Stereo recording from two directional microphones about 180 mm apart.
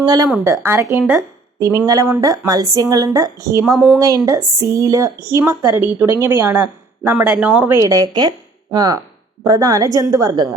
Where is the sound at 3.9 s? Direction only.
20° right (ahead or behind).